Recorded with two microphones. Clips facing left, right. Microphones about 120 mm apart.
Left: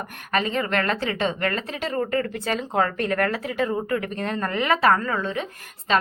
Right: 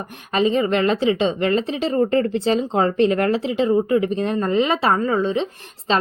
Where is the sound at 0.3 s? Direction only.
20° right (ahead or behind).